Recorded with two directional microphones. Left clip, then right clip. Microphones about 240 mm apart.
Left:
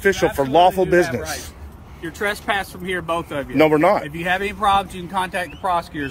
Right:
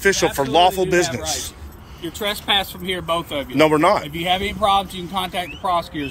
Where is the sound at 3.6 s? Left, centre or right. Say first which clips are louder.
Even; centre.